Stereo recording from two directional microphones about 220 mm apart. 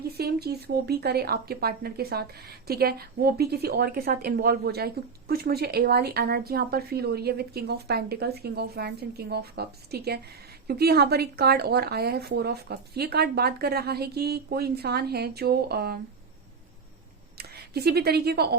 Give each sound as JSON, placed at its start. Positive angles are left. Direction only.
{"t": 0.2, "sound": "speech", "side_deg": -45}
{"t": 17.3, "sound": "speech", "side_deg": -45}